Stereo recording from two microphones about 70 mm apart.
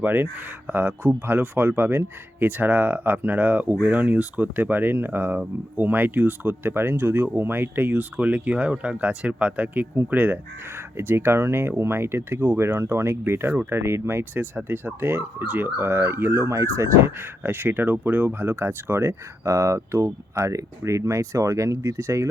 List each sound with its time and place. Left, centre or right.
0.0 s speech: right
8.1 s speech: centre; by 16.9 s right
17.2 s speech: right